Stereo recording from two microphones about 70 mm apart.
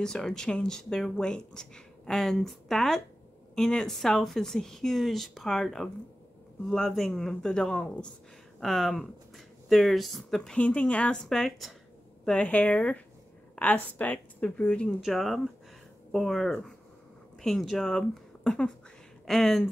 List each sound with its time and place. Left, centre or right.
0.0 s speech: centre
8.5 s speech: centre
10.6 s speech: centre
11.2 s speech: centre
12.4 s a woman's voice: left
15.0 s speech: centre